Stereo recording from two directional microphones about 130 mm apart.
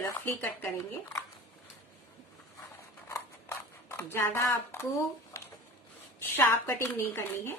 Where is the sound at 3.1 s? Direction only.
20° left (ahead or behind).